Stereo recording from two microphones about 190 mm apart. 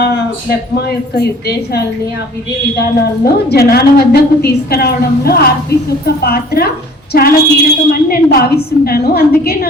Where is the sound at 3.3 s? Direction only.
55° left (ahead or behind).